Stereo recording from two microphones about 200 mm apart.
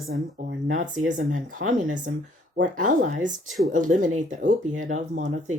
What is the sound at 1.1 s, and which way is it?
Speech, 40° right (ahead or behind).